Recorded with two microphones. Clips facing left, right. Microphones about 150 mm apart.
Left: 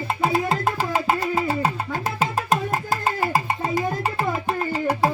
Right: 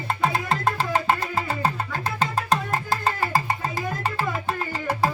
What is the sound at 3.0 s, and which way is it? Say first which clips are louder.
Music: left 2 dB; 15° left (ahead or behind).